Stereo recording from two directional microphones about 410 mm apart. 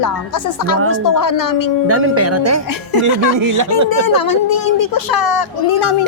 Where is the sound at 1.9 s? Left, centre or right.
Right.